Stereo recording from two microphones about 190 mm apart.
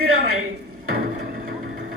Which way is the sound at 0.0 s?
90° right.